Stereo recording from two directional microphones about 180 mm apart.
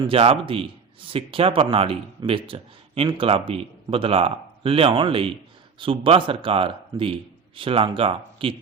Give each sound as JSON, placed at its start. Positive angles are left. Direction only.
{"t": 0.1, "sound": "a man's voice", "side_deg": -30}